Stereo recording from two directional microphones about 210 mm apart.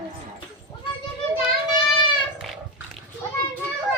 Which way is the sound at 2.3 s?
Centre (ahead or behind).